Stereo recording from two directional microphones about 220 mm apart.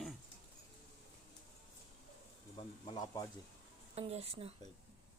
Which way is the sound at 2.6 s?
25° left (ahead or behind).